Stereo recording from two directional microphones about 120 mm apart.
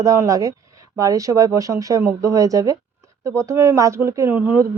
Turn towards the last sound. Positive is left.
turn(degrees=-20)  # may be behind; listen again after turning